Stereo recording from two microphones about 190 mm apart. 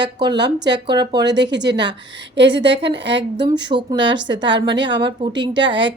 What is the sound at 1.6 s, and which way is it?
A woman's voice, 70° right (ahead or behind).